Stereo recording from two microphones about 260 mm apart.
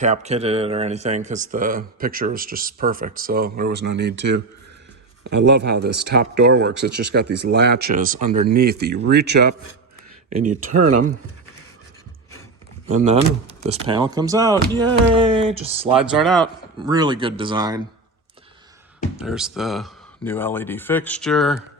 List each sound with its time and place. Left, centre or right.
0.0 s speech: right
10.2 s speech: right
13.7 s speech: centre
16.0 s speech: centre
16.8 s speech: centre
19.1 s speech: centre